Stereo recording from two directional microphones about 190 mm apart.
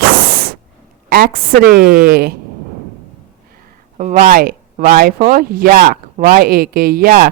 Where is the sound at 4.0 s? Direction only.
40° right (ahead or behind).